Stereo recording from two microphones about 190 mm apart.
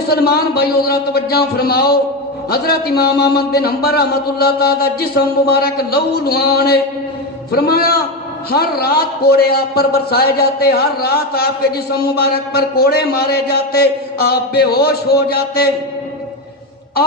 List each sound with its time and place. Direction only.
0.3 s a man's voice: 55° left (ahead or behind)